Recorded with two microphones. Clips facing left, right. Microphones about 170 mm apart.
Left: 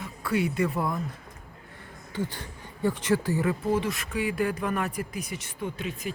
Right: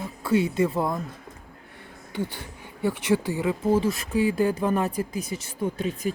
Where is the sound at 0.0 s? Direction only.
25° right (ahead or behind).